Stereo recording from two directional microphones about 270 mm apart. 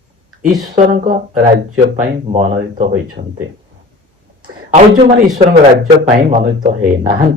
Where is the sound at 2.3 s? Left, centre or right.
Right.